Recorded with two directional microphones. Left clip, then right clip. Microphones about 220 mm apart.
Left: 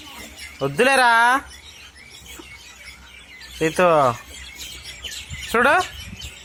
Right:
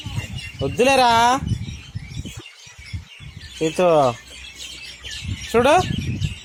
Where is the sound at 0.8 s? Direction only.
10° right (ahead or behind).